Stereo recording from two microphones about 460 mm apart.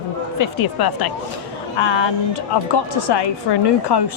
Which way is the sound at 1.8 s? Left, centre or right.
Left.